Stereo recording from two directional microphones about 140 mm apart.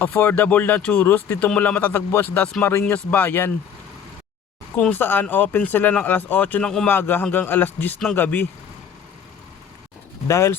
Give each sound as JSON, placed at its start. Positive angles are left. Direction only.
{"t": 0.0, "sound": "speech", "side_deg": 15}
{"t": 4.8, "sound": "speech", "side_deg": 10}
{"t": 10.2, "sound": "speech", "side_deg": 20}